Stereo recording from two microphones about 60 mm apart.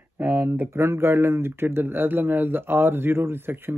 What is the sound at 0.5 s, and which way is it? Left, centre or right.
Speech, right.